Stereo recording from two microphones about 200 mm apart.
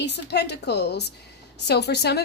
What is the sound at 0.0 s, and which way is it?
A woman's voice, 60° left (ahead or behind).